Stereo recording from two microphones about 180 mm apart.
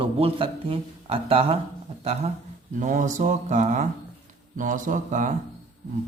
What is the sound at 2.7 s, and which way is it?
Speech, 45° right (ahead or behind).